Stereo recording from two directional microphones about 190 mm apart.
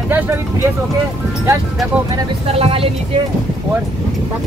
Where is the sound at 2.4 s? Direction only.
30° right (ahead or behind).